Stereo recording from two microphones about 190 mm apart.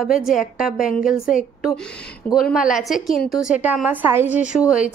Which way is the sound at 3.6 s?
10° right (ahead or behind).